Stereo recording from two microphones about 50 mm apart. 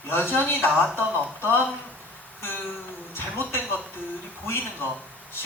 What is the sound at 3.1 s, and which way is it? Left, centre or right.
Speech, left.